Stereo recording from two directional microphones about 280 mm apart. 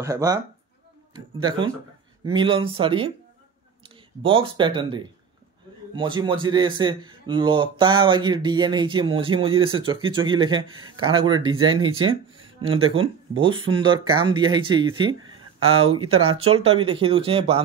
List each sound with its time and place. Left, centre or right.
0.0 s speech: centre